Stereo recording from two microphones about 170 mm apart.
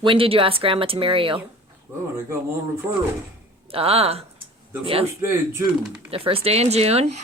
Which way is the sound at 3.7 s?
35° right (ahead or behind).